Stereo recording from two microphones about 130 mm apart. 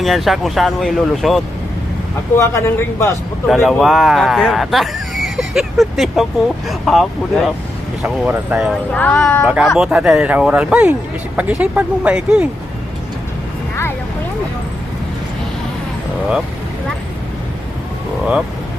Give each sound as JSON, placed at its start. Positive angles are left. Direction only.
{"t": 0.0, "sound": "speech", "side_deg": 0}
{"t": 2.4, "sound": "speech", "side_deg": 20}
{"t": 3.4, "sound": "speech", "side_deg": 0}
{"t": 8.0, "sound": "speech", "side_deg": -10}
{"t": 8.9, "sound": "speech", "side_deg": 15}
{"t": 9.7, "sound": "speech", "side_deg": -5}